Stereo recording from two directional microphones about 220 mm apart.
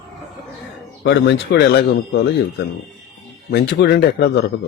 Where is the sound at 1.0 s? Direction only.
55° left (ahead or behind).